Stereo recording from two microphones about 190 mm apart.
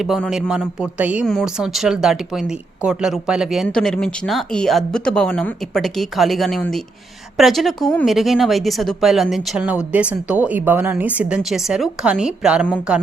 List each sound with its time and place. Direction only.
0.0 s a man's voice: centre (ahead or behind)